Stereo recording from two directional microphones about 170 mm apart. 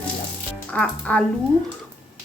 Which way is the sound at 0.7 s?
10° left (ahead or behind).